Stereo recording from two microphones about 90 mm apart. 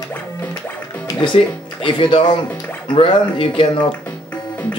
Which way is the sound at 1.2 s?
70° left (ahead or behind).